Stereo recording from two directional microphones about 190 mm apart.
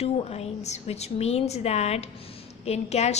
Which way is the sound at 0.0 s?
30° left (ahead or behind).